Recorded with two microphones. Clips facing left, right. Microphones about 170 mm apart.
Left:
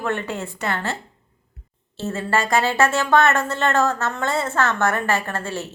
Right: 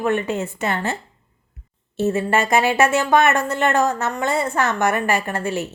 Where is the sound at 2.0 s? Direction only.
20° right (ahead or behind).